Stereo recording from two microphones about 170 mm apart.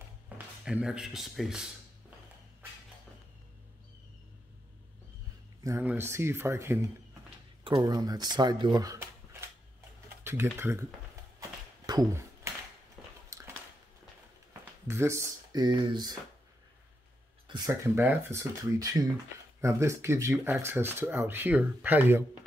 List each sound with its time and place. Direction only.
0.3 s a sound: 10° right (ahead or behind)
0.7 s speech: 5° right (ahead or behind)
5.6 s speech: 15° right (ahead or behind)
10.2 s speech: 15° right (ahead or behind)
11.3 s a sound: 20° right (ahead or behind)
14.9 s speech: 15° right (ahead or behind)
17.5 s speech: 25° right (ahead or behind)